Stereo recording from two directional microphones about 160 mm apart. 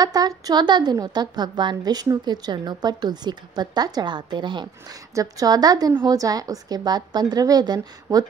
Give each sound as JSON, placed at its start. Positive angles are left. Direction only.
{"t": 0.0, "sound": "a woman's voice", "side_deg": -25}